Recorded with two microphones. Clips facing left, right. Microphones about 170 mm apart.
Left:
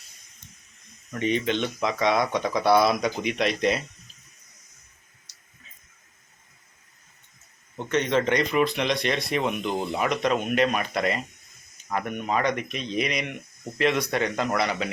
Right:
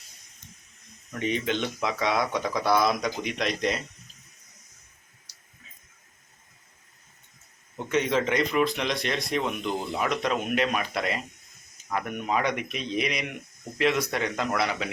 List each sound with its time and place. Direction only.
1.2 s speech: 5° right (ahead or behind)
7.8 s speech: 5° right (ahead or behind)